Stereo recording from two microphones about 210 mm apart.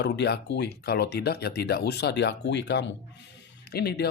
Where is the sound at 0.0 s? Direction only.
50° left (ahead or behind).